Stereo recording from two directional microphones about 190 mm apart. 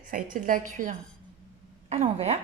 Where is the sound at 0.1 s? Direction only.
45° right (ahead or behind).